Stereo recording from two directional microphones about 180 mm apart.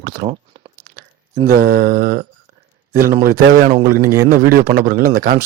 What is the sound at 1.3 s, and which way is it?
Speech, 55° right (ahead or behind).